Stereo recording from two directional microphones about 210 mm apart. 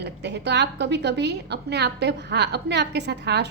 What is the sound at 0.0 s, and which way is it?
A woman's voice, 55° right (ahead or behind).